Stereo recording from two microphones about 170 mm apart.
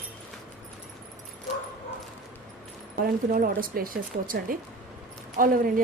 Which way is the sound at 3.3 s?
55° right (ahead or behind).